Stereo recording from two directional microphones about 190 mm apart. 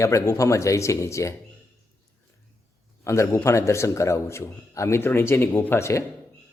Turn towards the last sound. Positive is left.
turn(degrees=15)  # may be behind; listen again after turning